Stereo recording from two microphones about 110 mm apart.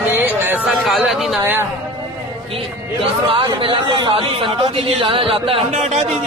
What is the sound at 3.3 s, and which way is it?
Speech, 50° right (ahead or behind).